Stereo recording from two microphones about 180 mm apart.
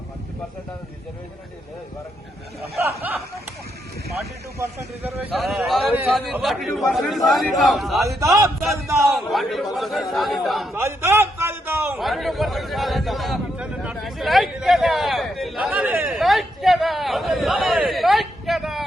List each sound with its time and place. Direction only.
4.5 s speech: 15° right (ahead or behind)
5.4 s a man's voice: centre (ahead or behind)
8.7 s speech: 15° right (ahead or behind)
9.1 s a man's voice: centre (ahead or behind)
10.8 s a sound: 15° right (ahead or behind)
11.9 s a sound: centre (ahead or behind)